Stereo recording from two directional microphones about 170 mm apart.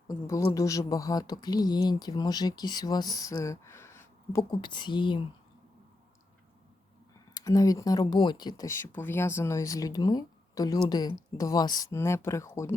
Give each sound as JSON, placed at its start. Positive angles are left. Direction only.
{"t": 0.1, "sound": "speech", "side_deg": 20}
{"t": 7.3, "sound": "speech", "side_deg": 20}